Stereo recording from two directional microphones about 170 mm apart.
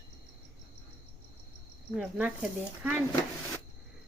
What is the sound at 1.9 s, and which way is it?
Speech, 5° right (ahead or behind).